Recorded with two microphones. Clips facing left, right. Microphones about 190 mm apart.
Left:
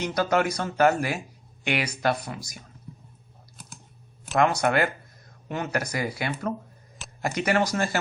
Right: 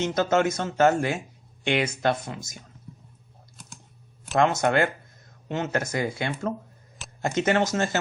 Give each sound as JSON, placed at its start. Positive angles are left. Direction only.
{"t": 0.0, "sound": "speech", "side_deg": -25}
{"t": 4.4, "sound": "speech", "side_deg": -25}